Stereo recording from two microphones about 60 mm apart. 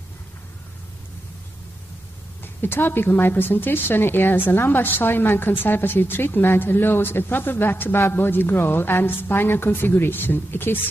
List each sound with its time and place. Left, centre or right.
2.4 s a woman's voice: left